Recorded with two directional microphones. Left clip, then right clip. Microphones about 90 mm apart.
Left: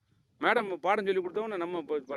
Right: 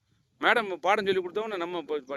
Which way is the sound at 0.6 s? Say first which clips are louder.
Right 3 dB; 30° right (ahead or behind).